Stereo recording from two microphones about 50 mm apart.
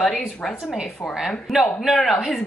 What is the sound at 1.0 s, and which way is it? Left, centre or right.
Speech, left.